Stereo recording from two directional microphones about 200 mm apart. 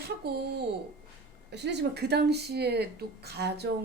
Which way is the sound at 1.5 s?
55° right (ahead or behind).